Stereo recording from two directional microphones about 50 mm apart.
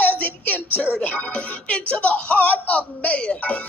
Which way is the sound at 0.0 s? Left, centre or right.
Left.